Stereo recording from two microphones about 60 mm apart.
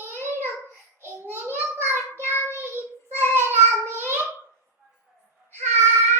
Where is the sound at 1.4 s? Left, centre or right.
Right.